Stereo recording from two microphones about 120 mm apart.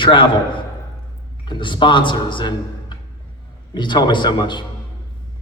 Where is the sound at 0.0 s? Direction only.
40° left (ahead or behind).